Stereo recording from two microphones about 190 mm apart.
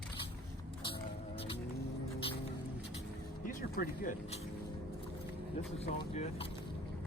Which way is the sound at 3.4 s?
45° left (ahead or behind).